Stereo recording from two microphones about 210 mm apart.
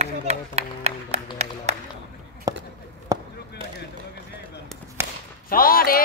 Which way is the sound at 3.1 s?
15° right (ahead or behind).